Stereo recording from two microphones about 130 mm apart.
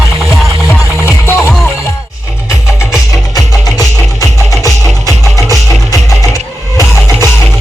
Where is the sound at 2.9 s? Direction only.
30° left (ahead or behind).